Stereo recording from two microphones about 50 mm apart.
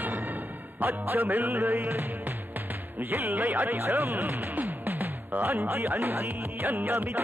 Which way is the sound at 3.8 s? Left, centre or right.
Right.